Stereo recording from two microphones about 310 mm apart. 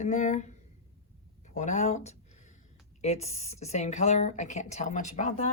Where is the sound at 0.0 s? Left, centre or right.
Left.